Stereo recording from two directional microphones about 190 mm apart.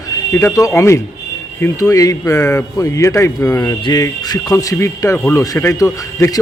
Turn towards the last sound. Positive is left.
turn(degrees=15)  # may be behind; listen again after turning